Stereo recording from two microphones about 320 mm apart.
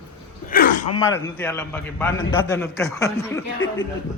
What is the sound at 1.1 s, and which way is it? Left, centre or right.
A man's voice, centre.